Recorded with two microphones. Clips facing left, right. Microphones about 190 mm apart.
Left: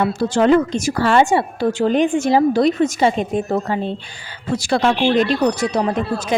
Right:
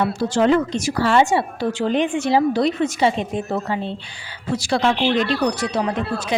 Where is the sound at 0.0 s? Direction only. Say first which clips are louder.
Left 2 dB; 50° left (ahead or behind).